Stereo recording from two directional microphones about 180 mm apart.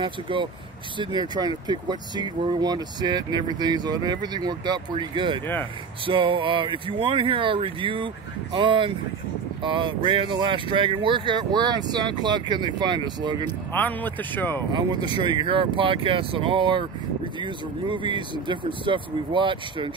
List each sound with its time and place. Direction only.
0.0 s speech: 25° right (ahead or behind)
13.7 s speech: 10° left (ahead or behind)
14.7 s speech: 25° right (ahead or behind)